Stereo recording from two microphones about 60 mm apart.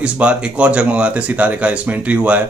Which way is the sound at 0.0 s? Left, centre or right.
Centre.